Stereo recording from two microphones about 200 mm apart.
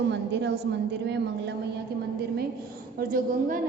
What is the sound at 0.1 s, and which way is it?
Speech, 60° right (ahead or behind).